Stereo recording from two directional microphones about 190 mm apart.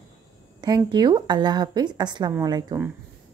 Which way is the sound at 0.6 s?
20° right (ahead or behind).